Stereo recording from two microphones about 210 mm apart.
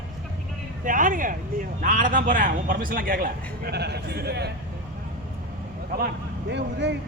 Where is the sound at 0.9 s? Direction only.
40° right (ahead or behind).